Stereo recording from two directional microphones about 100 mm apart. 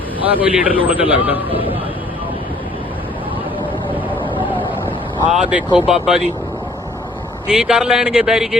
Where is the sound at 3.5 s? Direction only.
60° left (ahead or behind).